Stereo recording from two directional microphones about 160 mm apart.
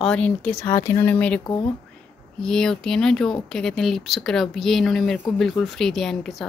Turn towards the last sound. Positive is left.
turn(degrees=0)  # may be behind; listen again after turning